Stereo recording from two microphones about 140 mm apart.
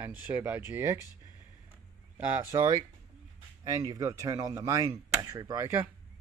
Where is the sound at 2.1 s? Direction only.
10° right (ahead or behind).